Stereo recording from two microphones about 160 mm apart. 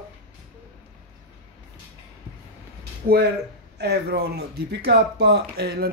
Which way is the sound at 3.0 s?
90° right.